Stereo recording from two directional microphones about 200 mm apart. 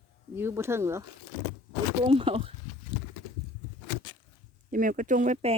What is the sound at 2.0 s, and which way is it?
Speech, 30° right (ahead or behind).